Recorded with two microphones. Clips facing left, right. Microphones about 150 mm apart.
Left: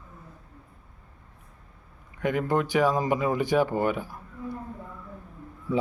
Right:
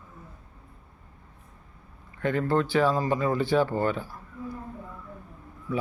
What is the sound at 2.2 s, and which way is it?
Speech, 15° left (ahead or behind).